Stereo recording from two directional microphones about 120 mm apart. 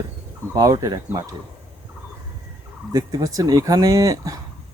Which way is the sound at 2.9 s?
30° right (ahead or behind).